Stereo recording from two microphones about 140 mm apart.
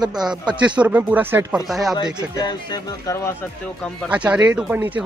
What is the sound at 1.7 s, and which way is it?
Speech, centre (ahead or behind).